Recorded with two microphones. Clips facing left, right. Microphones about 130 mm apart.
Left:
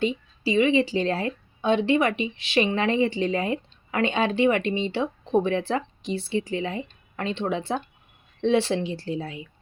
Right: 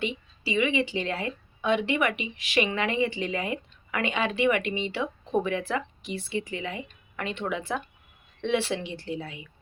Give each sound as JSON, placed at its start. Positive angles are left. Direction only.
{"t": 0.0, "sound": "a woman's voice", "side_deg": 35}